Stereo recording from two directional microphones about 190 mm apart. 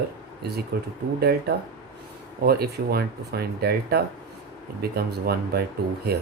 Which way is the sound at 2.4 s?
55° right (ahead or behind).